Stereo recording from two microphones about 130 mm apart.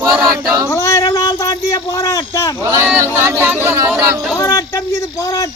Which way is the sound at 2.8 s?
15° right (ahead or behind).